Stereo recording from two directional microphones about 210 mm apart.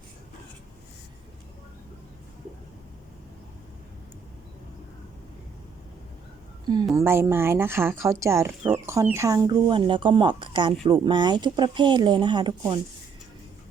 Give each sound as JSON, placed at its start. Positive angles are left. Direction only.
{"t": 6.7, "sound": "speech", "side_deg": -15}